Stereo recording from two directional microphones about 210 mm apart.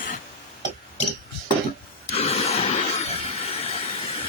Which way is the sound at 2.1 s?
30° left (ahead or behind).